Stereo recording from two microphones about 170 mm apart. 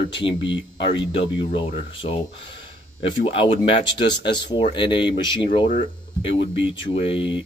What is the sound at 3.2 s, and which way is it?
Speech, 30° left (ahead or behind).